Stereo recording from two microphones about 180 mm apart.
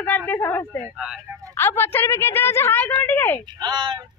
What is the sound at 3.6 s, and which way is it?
Speech, 25° right (ahead or behind).